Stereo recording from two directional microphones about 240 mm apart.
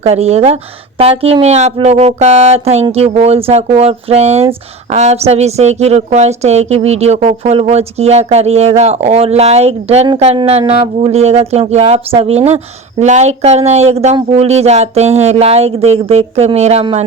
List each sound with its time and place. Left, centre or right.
0.0 s speech: right